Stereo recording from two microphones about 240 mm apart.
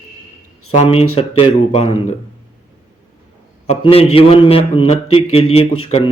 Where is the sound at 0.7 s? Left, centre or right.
Left.